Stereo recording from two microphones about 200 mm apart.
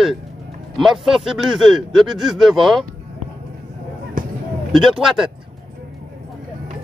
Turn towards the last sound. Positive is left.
turn(degrees=-5)  # may be behind; listen again after turning